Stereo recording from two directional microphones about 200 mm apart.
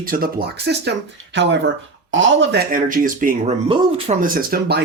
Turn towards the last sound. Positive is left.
turn(degrees=-50)  # may be behind; listen again after turning